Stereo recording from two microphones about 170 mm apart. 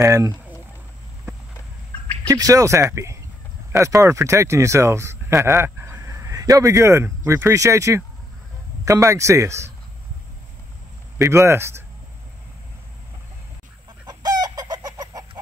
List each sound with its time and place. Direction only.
0.0 s speech: 20° right (ahead or behind)
2.2 s speech: 20° right (ahead or behind)
11.1 s speech: 15° right (ahead or behind)
14.0 s chicken: 25° right (ahead or behind)